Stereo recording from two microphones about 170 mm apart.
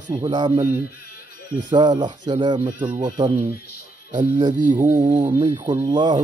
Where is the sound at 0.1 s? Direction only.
25° right (ahead or behind).